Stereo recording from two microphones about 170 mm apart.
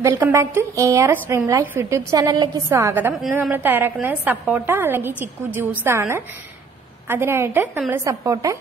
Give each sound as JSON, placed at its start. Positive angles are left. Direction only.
{"t": 0.0, "sound": "a woman's voice", "side_deg": -15}